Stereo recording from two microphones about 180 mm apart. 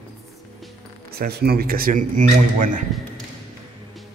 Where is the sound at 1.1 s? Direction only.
60° right (ahead or behind); by 2.8 s 45° right (ahead or behind).